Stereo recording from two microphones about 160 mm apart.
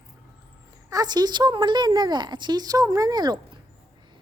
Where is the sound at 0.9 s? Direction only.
25° right (ahead or behind).